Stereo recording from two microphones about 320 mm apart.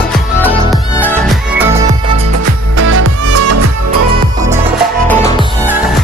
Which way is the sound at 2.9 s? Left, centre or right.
Right.